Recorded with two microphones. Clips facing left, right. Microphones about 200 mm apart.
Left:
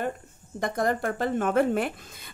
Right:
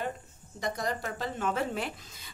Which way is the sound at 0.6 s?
55° left (ahead or behind).